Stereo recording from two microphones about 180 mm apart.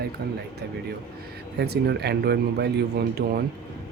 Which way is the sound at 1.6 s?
65° right (ahead or behind).